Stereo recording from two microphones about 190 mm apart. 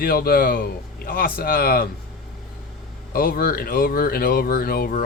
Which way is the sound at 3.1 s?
50° left (ahead or behind).